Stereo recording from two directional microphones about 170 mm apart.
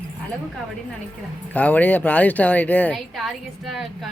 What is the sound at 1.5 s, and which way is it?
A woman's voice, 10° left (ahead or behind).